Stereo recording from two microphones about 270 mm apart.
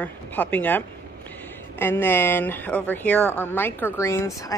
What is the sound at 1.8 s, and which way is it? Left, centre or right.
Speech, centre.